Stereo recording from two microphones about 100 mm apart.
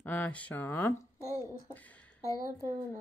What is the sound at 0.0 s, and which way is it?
Speech, 15° left (ahead or behind).